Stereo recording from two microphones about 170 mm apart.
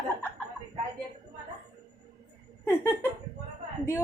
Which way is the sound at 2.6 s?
15° left (ahead or behind).